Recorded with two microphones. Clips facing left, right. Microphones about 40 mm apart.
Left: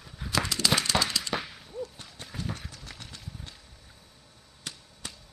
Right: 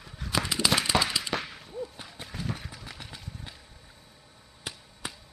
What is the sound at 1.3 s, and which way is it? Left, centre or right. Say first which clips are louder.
Whip: even; centre.